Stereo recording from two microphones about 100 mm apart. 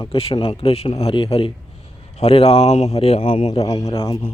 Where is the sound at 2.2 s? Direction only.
90° left.